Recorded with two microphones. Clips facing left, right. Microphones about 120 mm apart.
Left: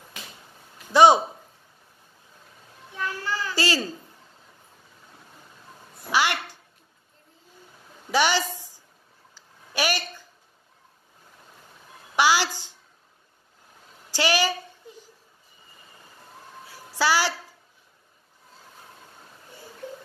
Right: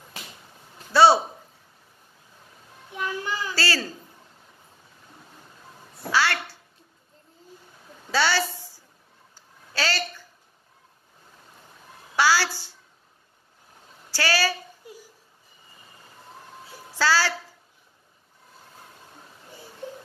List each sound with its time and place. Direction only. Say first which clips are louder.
0.9 s a woman's voice: left 1 dB; 15° left (ahead or behind)
2.9 s a child's voice: right 1 dB; 15° right (ahead or behind)
3.5 s a woman's voice: left 3 dB; 15° left (ahead or behind)
6.1 s a child's voice: even; 15° left (ahead or behind)
8.1 s a sound: left 1 dB; 15° left (ahead or behind)
9.8 s a woman's voice: left 1 dB; 15° left (ahead or behind)
12.2 s a woman's voice: even; 15° left (ahead or behind)
14.1 s a woman's voice: left 2 dB; 15° left (ahead or behind)
14.8 s a sound: right 2 dB; 10° right (ahead or behind)
17.0 s a woman's voice: even; 15° left (ahead or behind)